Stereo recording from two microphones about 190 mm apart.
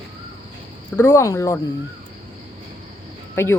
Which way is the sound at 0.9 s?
15° left (ahead or behind).